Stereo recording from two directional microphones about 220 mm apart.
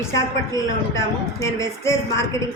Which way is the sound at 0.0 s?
15° left (ahead or behind).